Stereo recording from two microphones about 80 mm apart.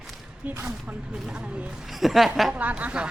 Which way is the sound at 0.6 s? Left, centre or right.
Centre.